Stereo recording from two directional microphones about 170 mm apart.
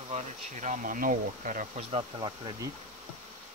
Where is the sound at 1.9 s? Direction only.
30° right (ahead or behind).